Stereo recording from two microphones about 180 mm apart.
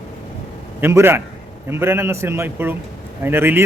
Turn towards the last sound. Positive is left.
turn(degrees=-10)  # may be behind; listen again after turning